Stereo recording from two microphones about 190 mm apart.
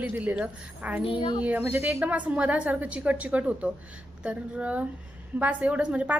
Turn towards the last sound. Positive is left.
turn(degrees=-5)  # may be behind; listen again after turning